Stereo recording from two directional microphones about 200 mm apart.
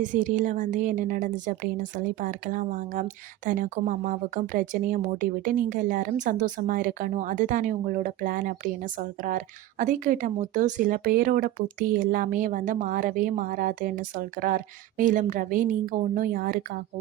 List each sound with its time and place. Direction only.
0.0 s a woman's voice: 40° right (ahead or behind)